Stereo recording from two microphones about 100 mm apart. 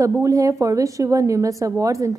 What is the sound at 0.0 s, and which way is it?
A woman's voice, 35° right (ahead or behind).